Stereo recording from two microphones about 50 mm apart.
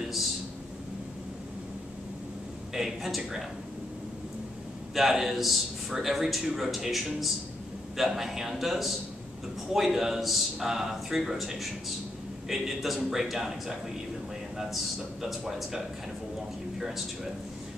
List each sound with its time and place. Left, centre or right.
2.7 s a man's voice: centre
4.9 s a man's voice: centre
15.2 s a man's voice: centre
16.8 s a man's voice: centre